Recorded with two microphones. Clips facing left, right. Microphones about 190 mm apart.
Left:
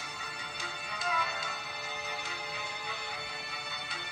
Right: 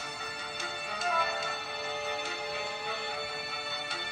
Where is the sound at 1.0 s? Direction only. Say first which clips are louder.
Right 3 dB; 50° right (ahead or behind).